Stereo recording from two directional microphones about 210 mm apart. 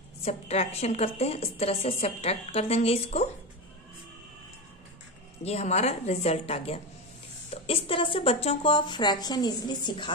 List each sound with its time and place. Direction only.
0.2 s a woman's voice: 30° left (ahead or behind)
5.4 s a woman's voice: 30° left (ahead or behind)